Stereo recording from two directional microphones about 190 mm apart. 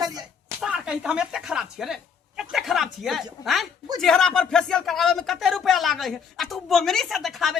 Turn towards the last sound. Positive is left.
turn(degrees=0)  # may be behind; listen again after turning